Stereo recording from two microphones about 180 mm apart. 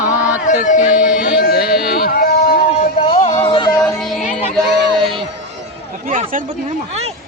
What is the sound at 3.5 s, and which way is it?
Yodeling, 30° left (ahead or behind).